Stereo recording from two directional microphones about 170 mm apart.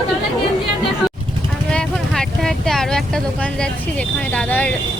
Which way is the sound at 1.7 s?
5° left (ahead or behind).